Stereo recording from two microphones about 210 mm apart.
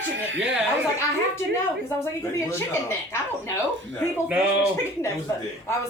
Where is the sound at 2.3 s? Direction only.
15° left (ahead or behind).